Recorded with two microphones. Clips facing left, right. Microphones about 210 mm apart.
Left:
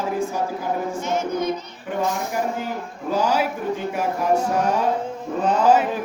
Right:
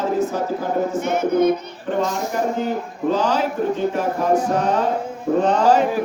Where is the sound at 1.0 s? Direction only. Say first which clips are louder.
Right 6 dB; 60° right (ahead or behind).